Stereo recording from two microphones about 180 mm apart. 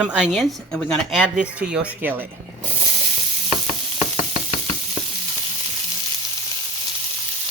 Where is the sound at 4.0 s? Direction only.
35° left (ahead or behind).